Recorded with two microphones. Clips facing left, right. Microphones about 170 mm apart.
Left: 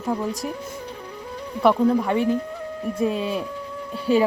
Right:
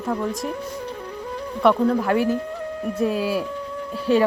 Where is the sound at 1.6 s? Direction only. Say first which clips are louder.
Even; centre (ahead or behind).